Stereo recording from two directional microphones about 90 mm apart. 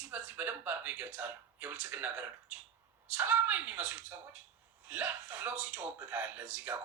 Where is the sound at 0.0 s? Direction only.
20° right (ahead or behind).